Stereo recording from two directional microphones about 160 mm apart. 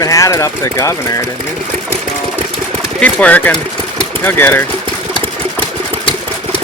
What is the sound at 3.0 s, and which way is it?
Speech, 10° left (ahead or behind).